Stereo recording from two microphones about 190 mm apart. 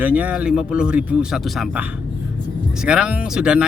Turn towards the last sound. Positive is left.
turn(degrees=-5)  # may be behind; listen again after turning